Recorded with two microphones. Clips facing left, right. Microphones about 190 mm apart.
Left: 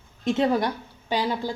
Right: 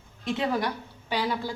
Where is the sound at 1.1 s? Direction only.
25° left (ahead or behind).